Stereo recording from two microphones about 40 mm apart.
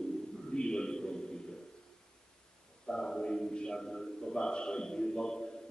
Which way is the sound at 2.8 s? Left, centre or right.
Centre.